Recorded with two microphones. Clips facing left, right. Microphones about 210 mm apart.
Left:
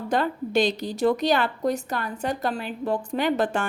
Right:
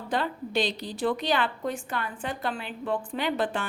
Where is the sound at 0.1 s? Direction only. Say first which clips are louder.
Left 5 dB; 45° left (ahead or behind).